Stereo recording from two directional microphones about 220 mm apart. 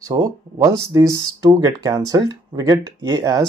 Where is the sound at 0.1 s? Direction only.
15° right (ahead or behind).